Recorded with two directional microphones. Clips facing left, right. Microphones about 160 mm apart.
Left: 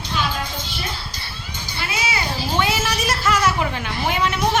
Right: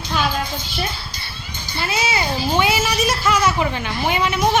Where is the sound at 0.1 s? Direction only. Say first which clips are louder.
Right 3 dB; 50° right (ahead or behind).